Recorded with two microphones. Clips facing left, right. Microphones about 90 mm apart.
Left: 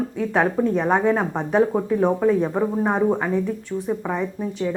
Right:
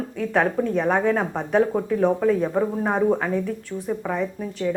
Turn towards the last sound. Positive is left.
turn(degrees=10)  # may be behind; listen again after turning